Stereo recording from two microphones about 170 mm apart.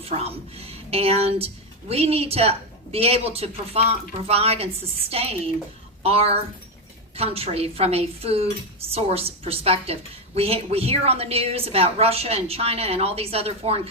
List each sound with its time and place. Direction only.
0.0 s a woman's voice: 35° right (ahead or behind)